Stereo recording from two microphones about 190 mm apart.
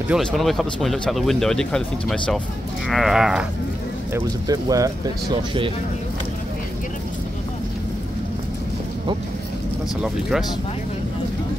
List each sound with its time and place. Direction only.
0.1 s speech: centre (ahead or behind)
4.1 s speech: 20° right (ahead or behind)